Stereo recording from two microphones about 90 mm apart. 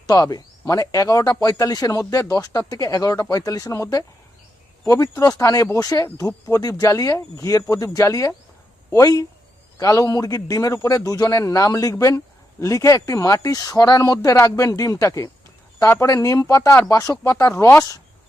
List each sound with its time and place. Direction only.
0.1 s a man's voice: 45° left (ahead or behind)